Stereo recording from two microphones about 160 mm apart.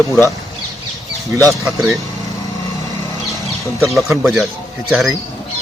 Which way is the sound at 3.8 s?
Centre (ahead or behind).